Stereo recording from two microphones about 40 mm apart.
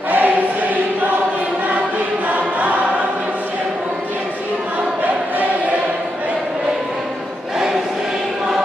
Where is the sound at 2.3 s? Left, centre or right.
Right.